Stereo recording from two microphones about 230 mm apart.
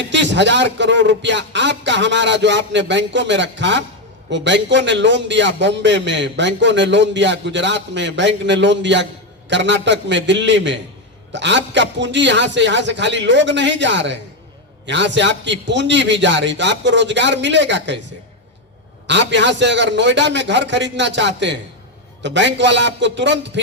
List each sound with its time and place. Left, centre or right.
0.1 s a man's voice: right
19.0 s a man's voice: right